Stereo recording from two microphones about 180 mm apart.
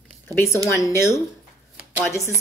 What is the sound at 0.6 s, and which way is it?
Speech, 15° left (ahead or behind).